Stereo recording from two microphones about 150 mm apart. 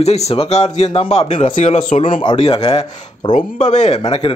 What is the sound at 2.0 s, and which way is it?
Speech, 30° left (ahead or behind).